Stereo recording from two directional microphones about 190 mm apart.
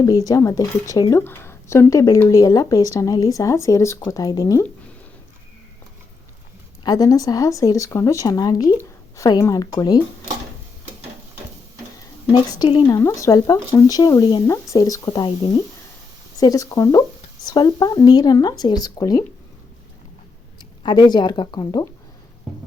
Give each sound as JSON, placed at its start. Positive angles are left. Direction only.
{"t": 0.0, "sound": "a woman's voice", "side_deg": 20}
{"t": 6.8, "sound": "speech", "side_deg": 20}
{"t": 12.3, "sound": "speech", "side_deg": 20}
{"t": 13.0, "sound": "a woman's voice", "side_deg": 15}
{"t": 16.4, "sound": "a woman's voice", "side_deg": 20}
{"t": 20.6, "sound": "speech", "side_deg": 25}